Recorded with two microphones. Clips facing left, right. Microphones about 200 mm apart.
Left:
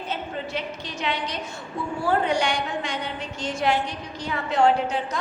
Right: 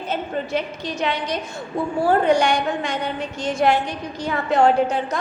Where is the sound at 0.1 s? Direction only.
45° right (ahead or behind).